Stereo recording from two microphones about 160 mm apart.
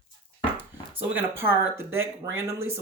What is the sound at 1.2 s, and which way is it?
Speech, 15° right (ahead or behind).